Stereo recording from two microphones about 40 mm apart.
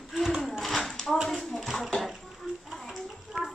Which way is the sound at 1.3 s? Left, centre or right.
Centre.